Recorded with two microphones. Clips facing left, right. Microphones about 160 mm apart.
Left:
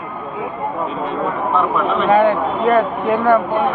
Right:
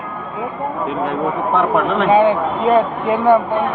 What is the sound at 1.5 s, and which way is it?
Speech, 75° right (ahead or behind).